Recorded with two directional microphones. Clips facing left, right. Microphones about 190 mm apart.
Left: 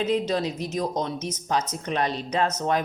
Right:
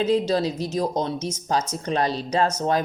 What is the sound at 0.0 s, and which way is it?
Speech, 35° right (ahead or behind).